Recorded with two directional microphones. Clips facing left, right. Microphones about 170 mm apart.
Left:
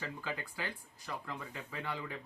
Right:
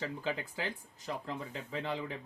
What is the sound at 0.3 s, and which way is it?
Speech, 20° right (ahead or behind).